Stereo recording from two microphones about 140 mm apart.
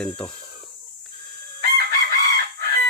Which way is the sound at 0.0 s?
5° left (ahead or behind).